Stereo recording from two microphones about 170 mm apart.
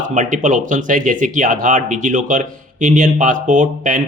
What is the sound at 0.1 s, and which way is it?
Speech, 45° right (ahead or behind).